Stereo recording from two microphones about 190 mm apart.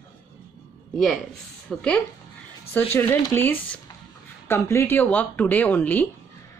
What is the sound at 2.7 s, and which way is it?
Speech, 10° left (ahead or behind).